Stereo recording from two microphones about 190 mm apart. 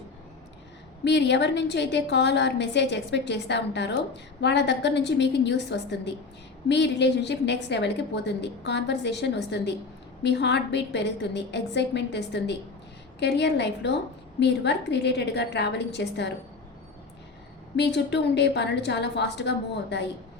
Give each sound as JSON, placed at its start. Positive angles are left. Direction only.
{"t": 1.0, "sound": "a woman's voice", "side_deg": 65}
{"t": 17.7, "sound": "a woman's voice", "side_deg": 65}